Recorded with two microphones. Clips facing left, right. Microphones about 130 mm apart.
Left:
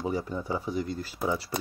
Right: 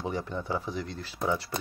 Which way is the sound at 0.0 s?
5° left (ahead or behind).